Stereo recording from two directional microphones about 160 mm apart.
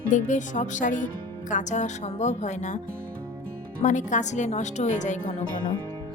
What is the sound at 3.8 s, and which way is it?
Speech, 50° left (ahead or behind).